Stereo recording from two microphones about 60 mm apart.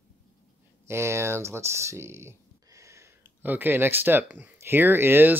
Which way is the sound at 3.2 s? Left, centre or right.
Right.